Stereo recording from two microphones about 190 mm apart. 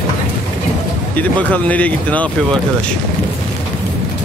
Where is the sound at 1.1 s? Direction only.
10° left (ahead or behind).